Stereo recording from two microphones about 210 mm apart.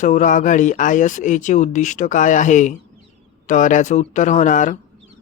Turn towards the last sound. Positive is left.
turn(degrees=35)  # may be behind; listen again after turning